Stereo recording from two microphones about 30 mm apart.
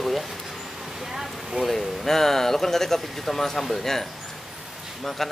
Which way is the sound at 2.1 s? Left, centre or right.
Centre.